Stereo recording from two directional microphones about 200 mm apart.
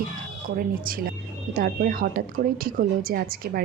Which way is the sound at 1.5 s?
45° right (ahead or behind).